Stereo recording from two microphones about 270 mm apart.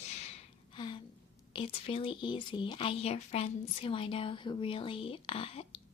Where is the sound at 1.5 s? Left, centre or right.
Centre.